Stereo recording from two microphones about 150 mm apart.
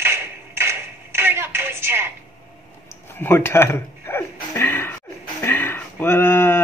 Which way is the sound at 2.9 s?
15° left (ahead or behind).